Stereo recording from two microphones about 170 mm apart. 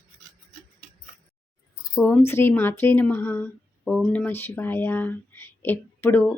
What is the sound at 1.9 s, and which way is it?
Speech, 15° left (ahead or behind).